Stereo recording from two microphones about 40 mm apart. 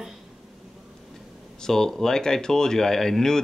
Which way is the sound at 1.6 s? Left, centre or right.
Centre.